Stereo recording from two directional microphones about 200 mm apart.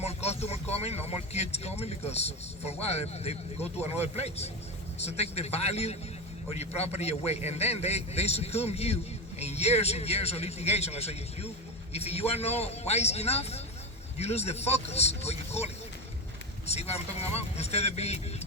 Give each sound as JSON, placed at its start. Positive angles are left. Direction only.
{"t": 0.0, "sound": "speech", "side_deg": 30}